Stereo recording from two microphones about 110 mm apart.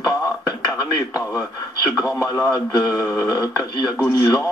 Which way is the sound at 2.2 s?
25° left (ahead or behind).